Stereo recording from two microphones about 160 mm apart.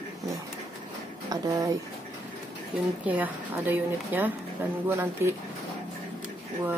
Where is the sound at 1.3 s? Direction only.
25° right (ahead or behind).